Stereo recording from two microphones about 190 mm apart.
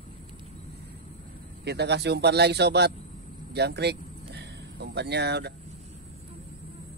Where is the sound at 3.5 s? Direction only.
60° right (ahead or behind).